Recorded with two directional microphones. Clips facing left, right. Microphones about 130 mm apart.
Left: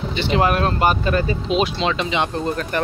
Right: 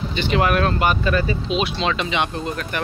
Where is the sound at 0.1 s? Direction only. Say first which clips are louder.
Left 1 dB; 25° left (ahead or behind).